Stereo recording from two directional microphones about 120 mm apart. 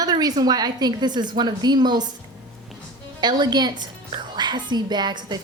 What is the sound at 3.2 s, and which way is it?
A woman's voice, 35° right (ahead or behind).